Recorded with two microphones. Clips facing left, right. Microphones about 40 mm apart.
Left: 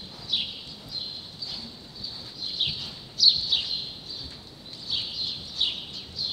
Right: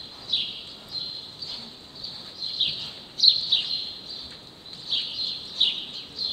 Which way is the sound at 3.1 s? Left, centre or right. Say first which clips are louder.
Right 1 dB; right.